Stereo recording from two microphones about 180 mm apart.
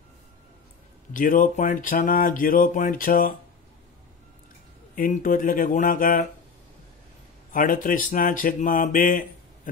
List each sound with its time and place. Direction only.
1.1 s speech: 50° left (ahead or behind)
4.9 s speech: 50° left (ahead or behind)
7.5 s speech: 50° left (ahead or behind)